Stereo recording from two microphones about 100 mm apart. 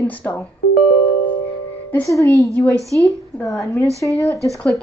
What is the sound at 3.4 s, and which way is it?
Speech, 35° left (ahead or behind).